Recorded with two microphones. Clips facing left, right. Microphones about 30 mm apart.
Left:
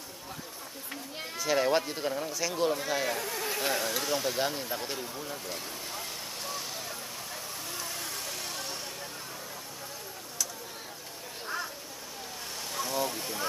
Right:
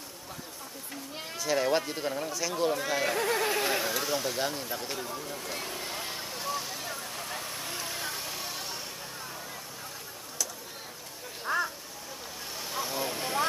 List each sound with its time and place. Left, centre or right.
1.1 s speech: centre
2.7 s speech: centre
3.2 s speech: right
3.6 s speech: centre
5.6 s vehicle: right
6.4 s vehicle: centre
7.2 s vehicle: right; by 8.7 s centre
11.4 s a sound: right
12.7 s vehicle: centre